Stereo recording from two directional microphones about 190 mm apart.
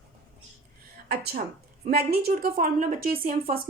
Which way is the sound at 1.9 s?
50° right (ahead or behind).